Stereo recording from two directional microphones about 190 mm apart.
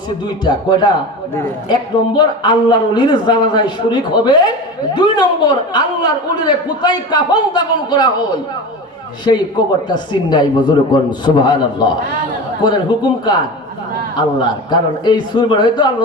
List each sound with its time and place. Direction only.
0.4 s a man's voice: 20° left (ahead or behind)
9.3 s a man's voice: 25° left (ahead or behind)